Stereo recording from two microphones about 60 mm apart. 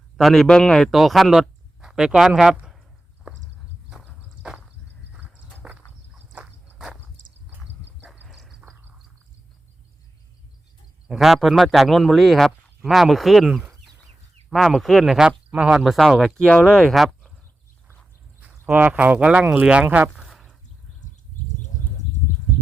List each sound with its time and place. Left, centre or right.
0.2 s speech: centre
0.9 s speech: centre
3.3 s horse: right
8.3 s dog: centre
11.2 s speech: centre
14.8 s speech: centre
15.0 s speech: centre
15.9 s speech: centre
16.6 s speech: centre
16.9 s a sound: centre
18.6 s speech: right
20.2 s a sound: centre